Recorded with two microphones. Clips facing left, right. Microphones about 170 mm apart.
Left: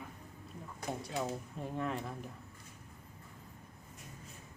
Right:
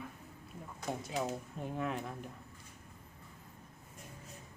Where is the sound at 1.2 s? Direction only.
Centre (ahead or behind).